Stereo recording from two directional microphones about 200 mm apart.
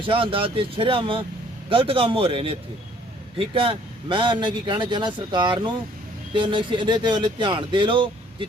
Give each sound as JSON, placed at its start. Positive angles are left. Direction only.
{"t": 0.0, "sound": "speech", "side_deg": -25}